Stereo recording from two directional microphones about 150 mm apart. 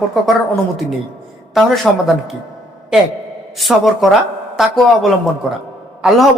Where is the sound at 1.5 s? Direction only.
Centre (ahead or behind).